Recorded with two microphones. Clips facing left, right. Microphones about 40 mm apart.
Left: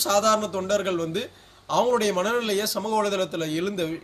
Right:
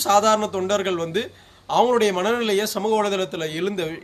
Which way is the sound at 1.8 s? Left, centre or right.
Right.